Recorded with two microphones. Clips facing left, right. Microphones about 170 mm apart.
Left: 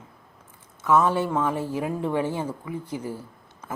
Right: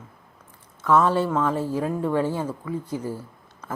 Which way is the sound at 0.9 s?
15° left (ahead or behind).